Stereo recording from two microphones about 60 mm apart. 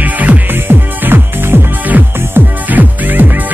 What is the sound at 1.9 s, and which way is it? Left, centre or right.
Music, right.